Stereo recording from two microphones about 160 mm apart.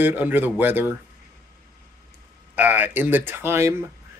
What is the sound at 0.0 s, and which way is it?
Speech, 10° right (ahead or behind).